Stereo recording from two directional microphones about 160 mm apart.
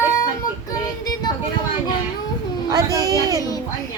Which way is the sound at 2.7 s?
20° right (ahead or behind).